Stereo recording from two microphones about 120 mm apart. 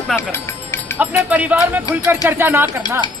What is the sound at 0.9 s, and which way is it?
Speech, 10° right (ahead or behind).